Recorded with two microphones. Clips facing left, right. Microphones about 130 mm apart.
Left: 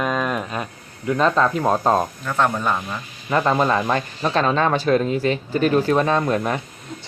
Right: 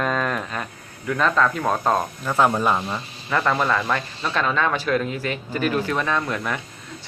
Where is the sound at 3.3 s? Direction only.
25° left (ahead or behind).